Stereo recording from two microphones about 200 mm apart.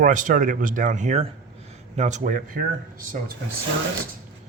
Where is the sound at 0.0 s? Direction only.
40° right (ahead or behind).